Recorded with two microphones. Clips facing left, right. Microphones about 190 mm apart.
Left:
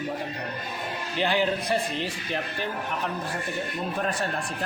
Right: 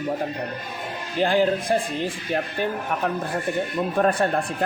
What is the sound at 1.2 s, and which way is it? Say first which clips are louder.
Speech: right 5 dB; 45° right (ahead or behind).